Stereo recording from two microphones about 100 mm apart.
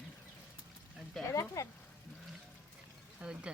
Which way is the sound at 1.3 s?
30° left (ahead or behind).